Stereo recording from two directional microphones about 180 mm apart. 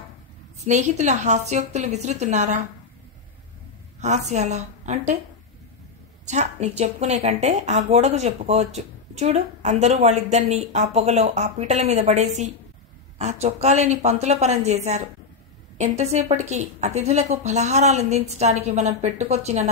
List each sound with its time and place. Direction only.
0.7 s speech: 40° right (ahead or behind)
4.0 s speech: 40° right (ahead or behind)
6.2 s a woman's voice: 40° right (ahead or behind)